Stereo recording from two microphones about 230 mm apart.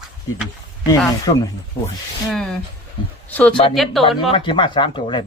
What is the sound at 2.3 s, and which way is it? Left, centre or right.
Speech, centre.